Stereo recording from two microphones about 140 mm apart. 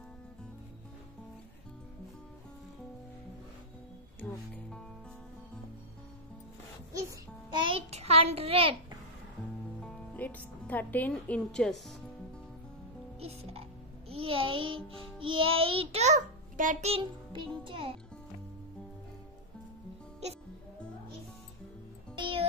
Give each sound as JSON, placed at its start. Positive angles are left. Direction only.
{"t": 4.2, "sound": "music", "side_deg": 15}
{"t": 6.9, "sound": "music", "side_deg": -25}
{"t": 7.6, "sound": "a child's voice", "side_deg": -45}
{"t": 9.8, "sound": "music", "side_deg": 10}
{"t": 13.2, "sound": "music", "side_deg": -45}
{"t": 14.9, "sound": "a child's voice", "side_deg": -40}
{"t": 16.9, "sound": "music", "side_deg": -35}
{"t": 17.6, "sound": "a child's voice", "side_deg": -40}
{"t": 22.1, "sound": "music", "side_deg": -35}